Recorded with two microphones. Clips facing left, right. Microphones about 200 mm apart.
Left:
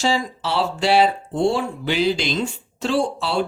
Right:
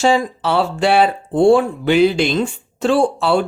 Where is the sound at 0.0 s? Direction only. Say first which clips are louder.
Right 6 dB; 55° right (ahead or behind).